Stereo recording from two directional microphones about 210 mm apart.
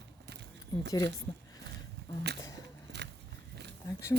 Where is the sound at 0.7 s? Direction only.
20° left (ahead or behind).